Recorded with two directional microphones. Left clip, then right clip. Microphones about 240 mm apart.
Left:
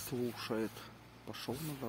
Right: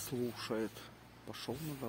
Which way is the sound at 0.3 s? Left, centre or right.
Centre.